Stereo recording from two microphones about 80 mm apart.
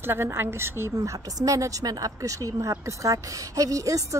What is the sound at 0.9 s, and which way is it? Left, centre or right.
A woman's voice, right.